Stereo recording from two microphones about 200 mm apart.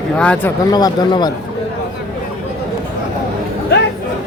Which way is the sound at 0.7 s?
20° left (ahead or behind).